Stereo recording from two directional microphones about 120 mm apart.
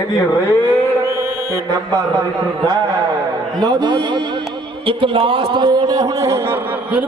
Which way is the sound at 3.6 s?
35° right (ahead or behind).